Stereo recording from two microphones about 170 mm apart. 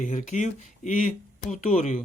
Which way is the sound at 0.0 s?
45° left (ahead or behind).